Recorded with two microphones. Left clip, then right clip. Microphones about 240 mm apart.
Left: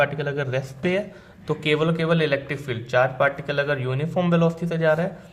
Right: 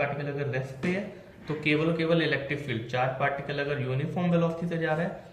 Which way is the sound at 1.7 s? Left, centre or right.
Left.